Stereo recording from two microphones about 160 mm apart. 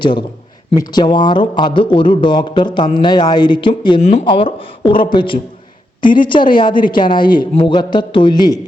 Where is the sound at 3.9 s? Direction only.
40° left (ahead or behind).